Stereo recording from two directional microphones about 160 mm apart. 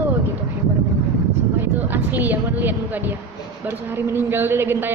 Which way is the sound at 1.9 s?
10° right (ahead or behind).